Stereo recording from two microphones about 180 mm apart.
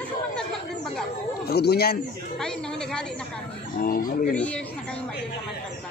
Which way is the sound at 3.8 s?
50° left (ahead or behind).